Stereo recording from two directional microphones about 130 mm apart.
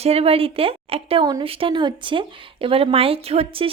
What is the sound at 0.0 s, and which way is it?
Speech, 50° right (ahead or behind).